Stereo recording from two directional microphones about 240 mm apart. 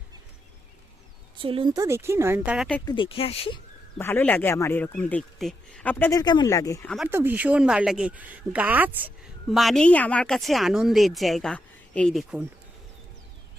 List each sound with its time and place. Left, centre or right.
1.4 s a woman's voice: right; by 2.6 s centre
2.8 s speech: left
3.9 s speech: centre
6.9 s a woman's voice: centre